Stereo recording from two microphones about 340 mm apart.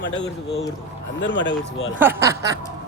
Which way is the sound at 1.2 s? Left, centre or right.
Left.